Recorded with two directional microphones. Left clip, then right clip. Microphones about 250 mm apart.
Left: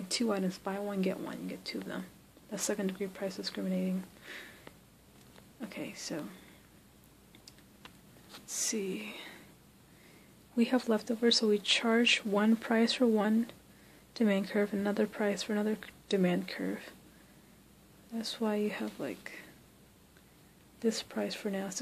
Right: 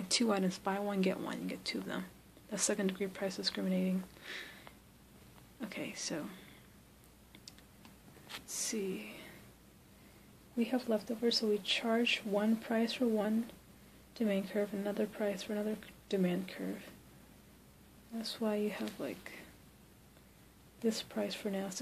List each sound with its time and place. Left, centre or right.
0.1 s speech: centre
5.6 s speech: centre
8.5 s whispering: centre
10.6 s speech: left
18.2 s speech: centre
20.8 s speech: centre